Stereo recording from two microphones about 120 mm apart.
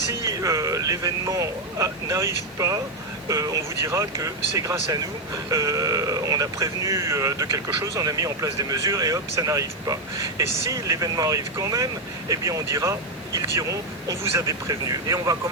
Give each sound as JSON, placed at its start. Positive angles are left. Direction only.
{"t": 0.1, "sound": "speech", "side_deg": -25}